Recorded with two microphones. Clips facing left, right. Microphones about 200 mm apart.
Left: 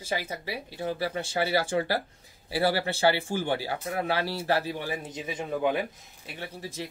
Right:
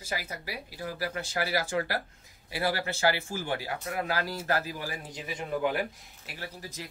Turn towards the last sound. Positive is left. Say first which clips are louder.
# left 4 dB
turn(degrees=25)  # may be behind; listen again after turning